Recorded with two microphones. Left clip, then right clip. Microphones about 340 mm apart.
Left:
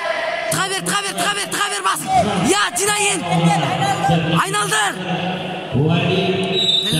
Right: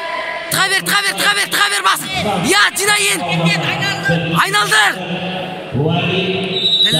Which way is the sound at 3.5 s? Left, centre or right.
Left.